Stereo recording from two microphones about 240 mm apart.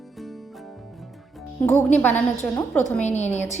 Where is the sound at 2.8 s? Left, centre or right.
Left.